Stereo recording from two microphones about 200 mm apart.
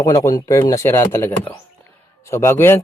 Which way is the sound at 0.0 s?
15° left (ahead or behind).